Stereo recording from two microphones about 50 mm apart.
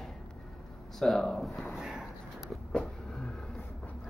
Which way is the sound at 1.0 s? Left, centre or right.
Centre.